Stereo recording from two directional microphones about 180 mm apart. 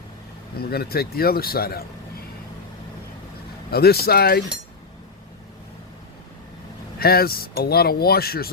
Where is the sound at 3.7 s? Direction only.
60° left (ahead or behind).